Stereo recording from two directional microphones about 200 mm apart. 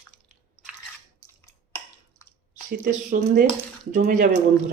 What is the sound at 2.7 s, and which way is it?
Speech, 45° right (ahead or behind).